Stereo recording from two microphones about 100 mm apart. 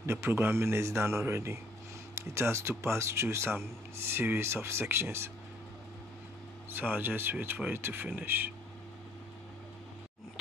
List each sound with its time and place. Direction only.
0.0 s speech: 25° right (ahead or behind)
6.7 s speech: 20° right (ahead or behind)